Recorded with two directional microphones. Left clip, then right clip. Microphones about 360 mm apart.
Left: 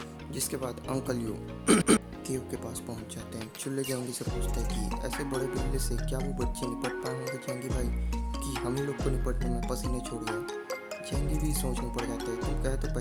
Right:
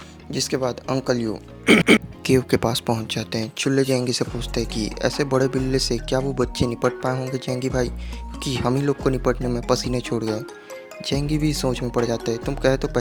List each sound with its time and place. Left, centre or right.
0.3 s speech: left
2.2 s speech: left